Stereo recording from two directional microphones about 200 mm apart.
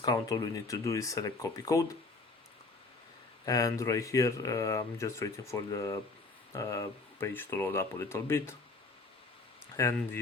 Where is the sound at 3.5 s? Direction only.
20° left (ahead or behind).